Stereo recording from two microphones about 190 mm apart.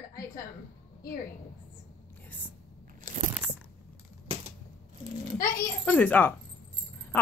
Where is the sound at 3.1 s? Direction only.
45° right (ahead or behind).